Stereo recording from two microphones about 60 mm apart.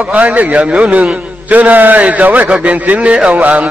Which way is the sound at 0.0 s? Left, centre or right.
Right.